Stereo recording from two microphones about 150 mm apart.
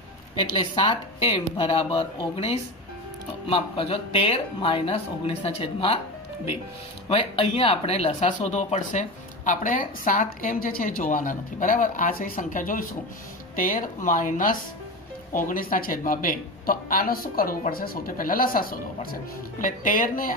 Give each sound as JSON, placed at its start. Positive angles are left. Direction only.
{"t": 0.4, "sound": "speech", "side_deg": 35}
{"t": 7.1, "sound": "speech", "side_deg": 40}